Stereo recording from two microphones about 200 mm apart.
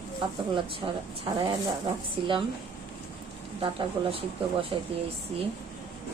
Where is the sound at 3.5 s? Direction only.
25° right (ahead or behind).